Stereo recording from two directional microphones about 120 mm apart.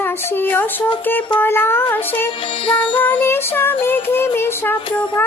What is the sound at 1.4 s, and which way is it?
Music, 20° left (ahead or behind).